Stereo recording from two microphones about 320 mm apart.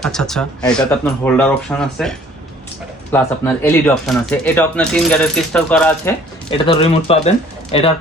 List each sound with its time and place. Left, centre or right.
0.0 s speech: centre
6.5 s speech: centre